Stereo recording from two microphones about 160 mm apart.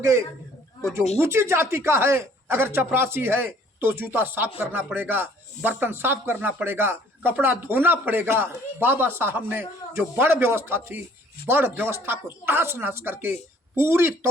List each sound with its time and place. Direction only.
0.0 s speech: 15° right (ahead or behind)